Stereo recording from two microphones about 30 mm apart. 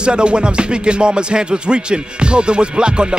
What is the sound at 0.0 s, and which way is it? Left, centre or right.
Music, right.